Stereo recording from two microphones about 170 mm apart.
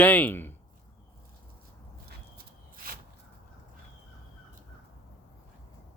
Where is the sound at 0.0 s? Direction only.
10° left (ahead or behind).